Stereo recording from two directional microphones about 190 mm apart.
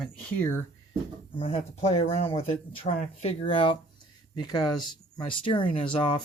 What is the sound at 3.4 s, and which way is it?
Speech, 30° left (ahead or behind).